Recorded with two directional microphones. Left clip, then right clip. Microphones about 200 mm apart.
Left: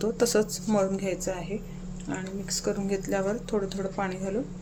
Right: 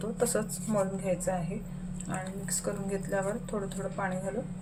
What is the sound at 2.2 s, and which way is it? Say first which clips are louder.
Speech: left 5 dB; 40° left (ahead or behind).